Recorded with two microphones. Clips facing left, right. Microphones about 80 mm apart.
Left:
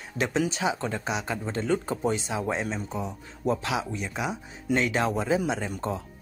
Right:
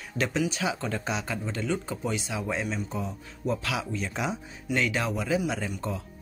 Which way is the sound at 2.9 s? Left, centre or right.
Centre.